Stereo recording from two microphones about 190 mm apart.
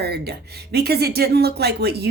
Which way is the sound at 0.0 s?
55° right (ahead or behind).